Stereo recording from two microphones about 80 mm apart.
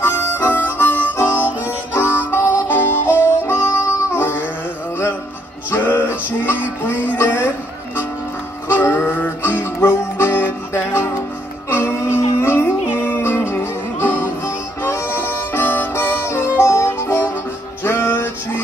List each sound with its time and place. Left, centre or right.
0.0 s harmonica: left
5.7 s music: left
14.8 s harmonica: left
17.8 s music: left